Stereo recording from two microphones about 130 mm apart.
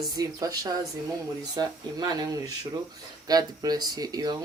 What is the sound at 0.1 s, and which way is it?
Speech, 30° right (ahead or behind).